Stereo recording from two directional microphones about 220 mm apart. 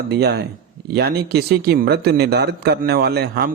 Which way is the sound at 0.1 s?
50° right (ahead or behind).